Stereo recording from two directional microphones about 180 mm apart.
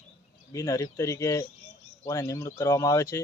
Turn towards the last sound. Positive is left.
turn(degrees=20)  # may be behind; listen again after turning